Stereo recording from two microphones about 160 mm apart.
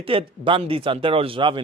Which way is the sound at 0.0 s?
35° right (ahead or behind).